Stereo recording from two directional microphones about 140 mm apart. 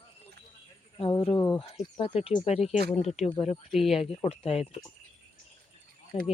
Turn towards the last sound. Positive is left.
turn(degrees=45)  # may be behind; listen again after turning